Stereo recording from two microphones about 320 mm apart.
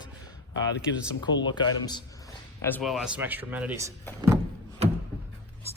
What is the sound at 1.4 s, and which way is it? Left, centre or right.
Speech, centre.